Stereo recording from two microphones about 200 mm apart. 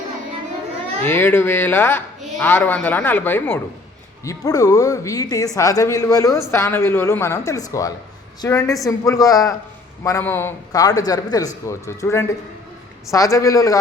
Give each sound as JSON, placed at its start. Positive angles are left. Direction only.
{"t": 1.0, "sound": "speech", "side_deg": 10}